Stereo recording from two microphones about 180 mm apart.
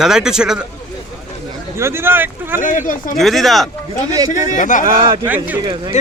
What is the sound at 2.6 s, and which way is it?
Speech, 45° left (ahead or behind).